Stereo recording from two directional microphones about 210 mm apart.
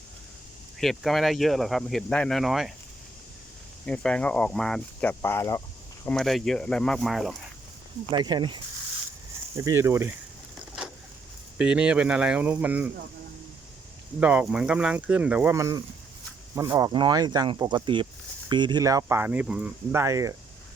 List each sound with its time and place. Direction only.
0.8 s speech: centre (ahead or behind)
3.8 s speech: 5° left (ahead or behind)
6.1 s speech: centre (ahead or behind)
8.1 s speech: 20° right (ahead or behind)
11.5 s speech: 5° right (ahead or behind)
14.2 s speech: 5° right (ahead or behind)